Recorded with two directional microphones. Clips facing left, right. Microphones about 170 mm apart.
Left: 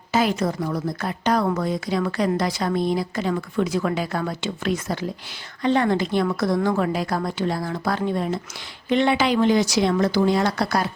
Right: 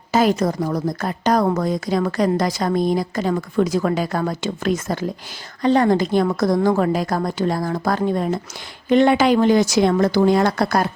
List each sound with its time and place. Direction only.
0.1 s a woman's voice: 40° right (ahead or behind)